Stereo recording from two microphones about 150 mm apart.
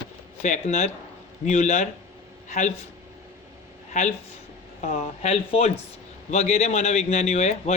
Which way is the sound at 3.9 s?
55° left (ahead or behind).